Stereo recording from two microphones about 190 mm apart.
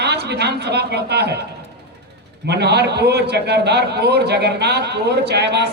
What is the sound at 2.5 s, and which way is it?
A man's voice, 60° right (ahead or behind).